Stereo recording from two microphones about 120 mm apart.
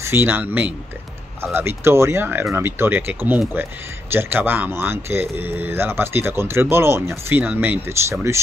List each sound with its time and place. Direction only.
0.0 s speech: 20° right (ahead or behind)